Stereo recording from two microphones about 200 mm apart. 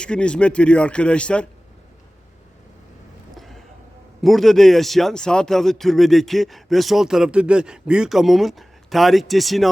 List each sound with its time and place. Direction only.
0.0 s speech: 5° left (ahead or behind)
3.3 s a sound: centre (ahead or behind)
4.2 s speech: centre (ahead or behind)